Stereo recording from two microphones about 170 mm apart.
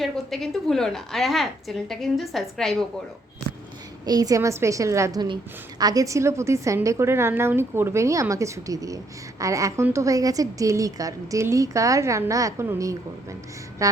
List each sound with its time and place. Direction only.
0.0 s a woman's voice: centre (ahead or behind)
4.0 s a woman's voice: 20° right (ahead or behind)